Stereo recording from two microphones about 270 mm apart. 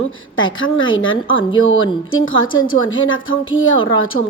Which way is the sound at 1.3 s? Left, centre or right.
Centre.